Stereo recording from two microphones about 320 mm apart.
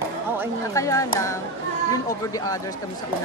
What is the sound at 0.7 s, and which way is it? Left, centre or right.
Speech, centre.